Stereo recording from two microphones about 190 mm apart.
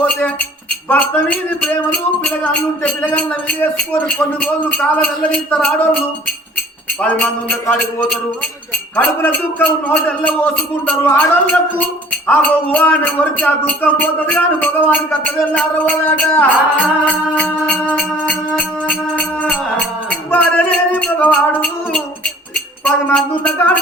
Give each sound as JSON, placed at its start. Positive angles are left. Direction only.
{"t": 0.0, "sound": "a man's voice", "side_deg": 10}
{"t": 7.0, "sound": "a man's voice", "side_deg": 5}